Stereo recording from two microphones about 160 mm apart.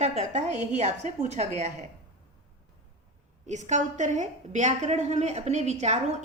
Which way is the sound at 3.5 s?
50° right (ahead or behind).